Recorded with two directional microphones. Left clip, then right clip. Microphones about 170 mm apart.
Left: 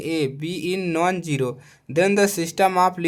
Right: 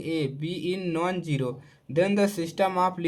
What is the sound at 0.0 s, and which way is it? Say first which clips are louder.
Speech: left 5 dB; 45° left (ahead or behind).